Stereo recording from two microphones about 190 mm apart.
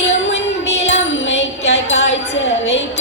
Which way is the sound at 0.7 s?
35° left (ahead or behind).